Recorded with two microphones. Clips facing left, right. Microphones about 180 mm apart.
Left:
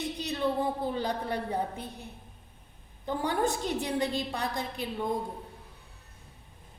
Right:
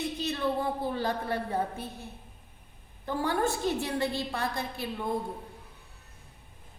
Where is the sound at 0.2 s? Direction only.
15° left (ahead or behind).